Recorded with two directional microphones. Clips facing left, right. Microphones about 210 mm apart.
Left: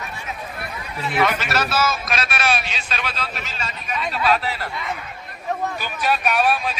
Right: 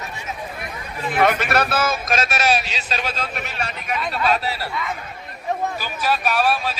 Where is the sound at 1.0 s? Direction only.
50° right (ahead or behind).